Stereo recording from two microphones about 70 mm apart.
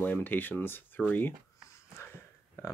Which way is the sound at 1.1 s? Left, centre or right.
Left.